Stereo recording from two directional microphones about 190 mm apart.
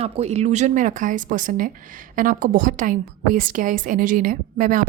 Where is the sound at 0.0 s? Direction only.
35° right (ahead or behind).